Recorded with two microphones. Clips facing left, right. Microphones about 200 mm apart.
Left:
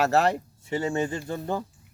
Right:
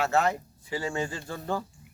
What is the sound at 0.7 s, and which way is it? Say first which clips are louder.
Speech: left 5 dB; 25° left (ahead or behind).